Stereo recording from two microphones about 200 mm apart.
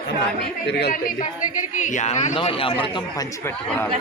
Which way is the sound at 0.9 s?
45° left (ahead or behind).